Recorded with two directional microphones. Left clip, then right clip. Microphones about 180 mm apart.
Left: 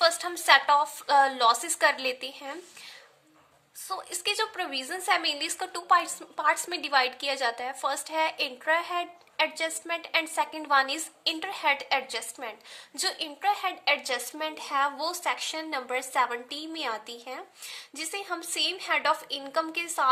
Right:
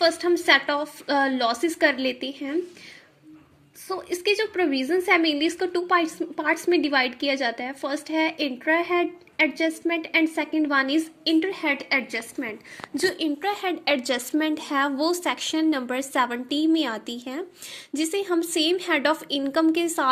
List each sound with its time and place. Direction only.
0.0 s a woman's voice: centre (ahead or behind)
3.8 s a woman's voice: 5° right (ahead or behind)
13.1 s a woman's voice: 20° right (ahead or behind)